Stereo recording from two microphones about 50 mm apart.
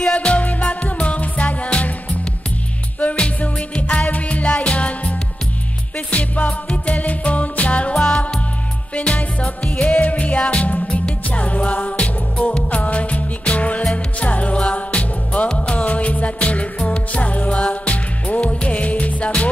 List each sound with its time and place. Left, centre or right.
0.0 s music: left
3.0 s music: left